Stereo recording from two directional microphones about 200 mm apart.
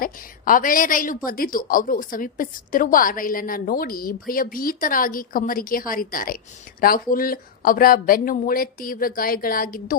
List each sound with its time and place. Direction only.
0.0 s a woman's voice: 45° left (ahead or behind)